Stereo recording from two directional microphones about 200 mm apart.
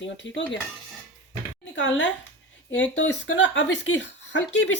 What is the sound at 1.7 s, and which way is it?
Speech, 65° left (ahead or behind).